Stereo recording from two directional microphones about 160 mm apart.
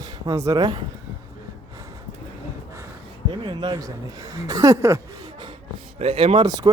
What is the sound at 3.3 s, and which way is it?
Speech, 30° right (ahead or behind).